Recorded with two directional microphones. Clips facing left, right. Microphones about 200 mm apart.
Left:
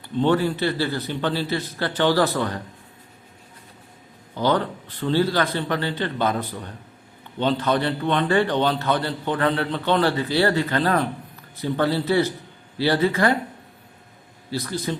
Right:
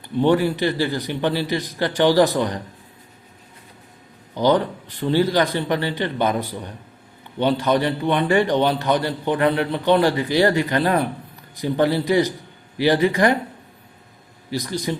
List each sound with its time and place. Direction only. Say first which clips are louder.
0.2 s a man's voice: right 2 dB; 10° right (ahead or behind)
4.4 s a man's voice: right 4 dB; 15° right (ahead or behind)
14.5 s a man's voice: right 2 dB; 15° right (ahead or behind)